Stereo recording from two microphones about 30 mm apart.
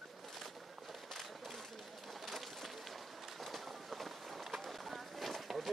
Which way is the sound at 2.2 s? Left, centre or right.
Centre.